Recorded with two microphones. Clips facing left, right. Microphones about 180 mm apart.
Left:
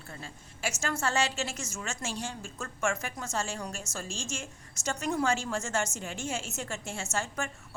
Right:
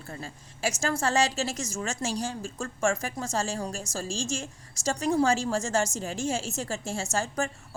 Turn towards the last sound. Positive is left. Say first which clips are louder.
# right 5 dB
turn(degrees=-35)  # may be behind; listen again after turning